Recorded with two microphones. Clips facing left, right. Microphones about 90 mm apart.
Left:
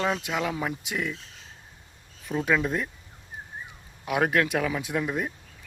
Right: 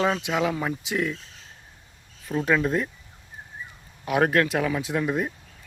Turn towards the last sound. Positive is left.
turn(degrees=0)  # may be behind; listen again after turning